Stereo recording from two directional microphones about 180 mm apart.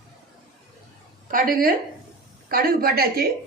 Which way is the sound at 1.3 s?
50° right (ahead or behind).